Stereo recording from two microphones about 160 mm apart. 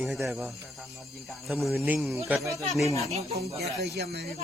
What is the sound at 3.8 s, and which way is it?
Speech, 90° right.